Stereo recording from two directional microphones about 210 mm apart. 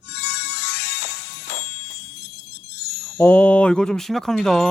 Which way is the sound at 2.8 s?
50° left (ahead or behind).